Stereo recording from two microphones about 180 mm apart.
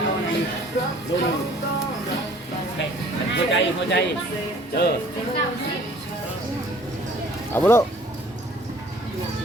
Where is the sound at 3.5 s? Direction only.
75° left (ahead or behind).